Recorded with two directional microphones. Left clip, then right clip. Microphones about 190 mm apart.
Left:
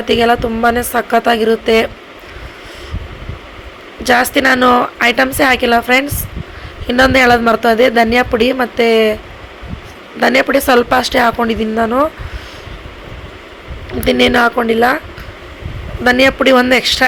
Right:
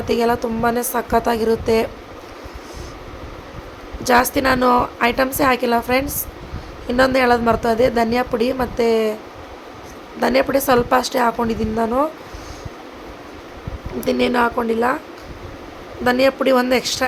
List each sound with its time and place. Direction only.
0.0 s a woman's voice: 10° left (ahead or behind)
4.0 s a woman's voice: 10° left (ahead or behind)
10.2 s a woman's voice: 10° left (ahead or behind)
14.0 s a woman's voice: 15° left (ahead or behind)
16.0 s a woman's voice: 15° left (ahead or behind)